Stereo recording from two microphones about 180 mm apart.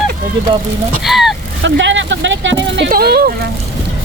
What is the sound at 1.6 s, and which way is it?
Speech, 90° right.